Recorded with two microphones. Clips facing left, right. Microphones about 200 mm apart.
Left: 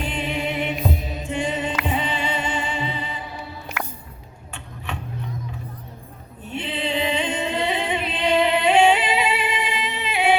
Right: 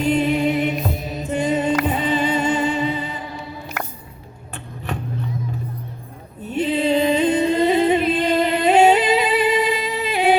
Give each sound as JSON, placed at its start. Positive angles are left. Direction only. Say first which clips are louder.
{"t": 0.0, "sound": "music", "louder": "right 9 dB", "side_deg": -40}
{"t": 6.4, "sound": "music", "louder": "right 8 dB", "side_deg": -40}